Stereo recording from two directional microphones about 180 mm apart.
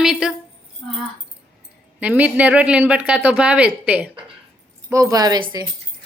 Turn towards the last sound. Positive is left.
turn(degrees=-20)  # may be behind; listen again after turning